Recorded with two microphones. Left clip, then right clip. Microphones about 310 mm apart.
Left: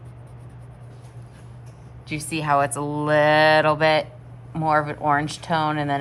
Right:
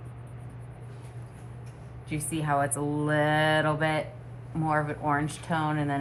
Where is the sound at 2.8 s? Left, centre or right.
Left.